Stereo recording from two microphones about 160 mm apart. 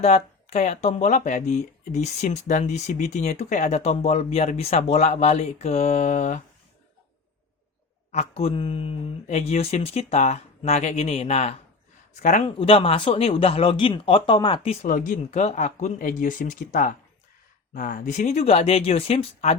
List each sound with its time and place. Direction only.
0.0 s speech: 45° left (ahead or behind)
8.1 s speech: 40° left (ahead or behind)
12.5 s speech: 35° left (ahead or behind)
14.8 s speech: 55° left (ahead or behind); by 19.5 s 40° left (ahead or behind)